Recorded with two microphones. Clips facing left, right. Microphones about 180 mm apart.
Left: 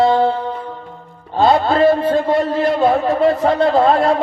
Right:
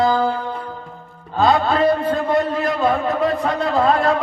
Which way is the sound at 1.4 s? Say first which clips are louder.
Left 3 dB; 25° left (ahead or behind).